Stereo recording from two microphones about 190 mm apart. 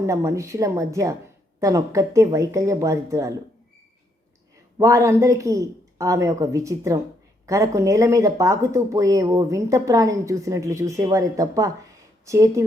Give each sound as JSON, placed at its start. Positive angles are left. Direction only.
{"t": 0.0, "sound": "speech", "side_deg": -15}
{"t": 4.8, "sound": "speech", "side_deg": -15}